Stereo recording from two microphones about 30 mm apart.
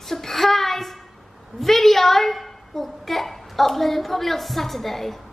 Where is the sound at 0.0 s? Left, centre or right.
Centre.